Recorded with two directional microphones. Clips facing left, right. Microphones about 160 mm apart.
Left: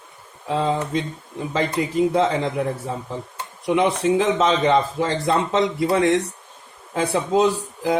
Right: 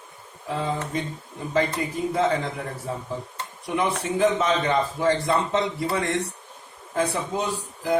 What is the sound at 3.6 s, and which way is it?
A man's voice, 90° left.